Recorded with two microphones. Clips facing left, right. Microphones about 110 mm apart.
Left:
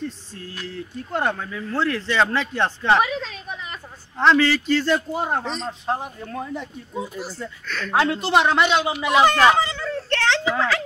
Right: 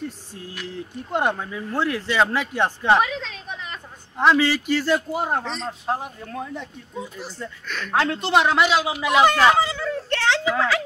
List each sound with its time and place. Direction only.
0.0 s speech: 15° right (ahead or behind)
3.0 s a sound: 5° left (ahead or behind)
4.2 s speech: 10° right (ahead or behind)
5.4 s speech: 15° left (ahead or behind)
5.7 s a man's voice: 5° right (ahead or behind)